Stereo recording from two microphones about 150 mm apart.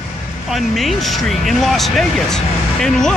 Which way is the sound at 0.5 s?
Centre (ahead or behind).